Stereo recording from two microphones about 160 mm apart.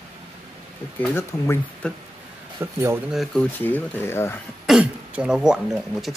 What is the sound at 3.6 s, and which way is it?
Speech, 15° left (ahead or behind).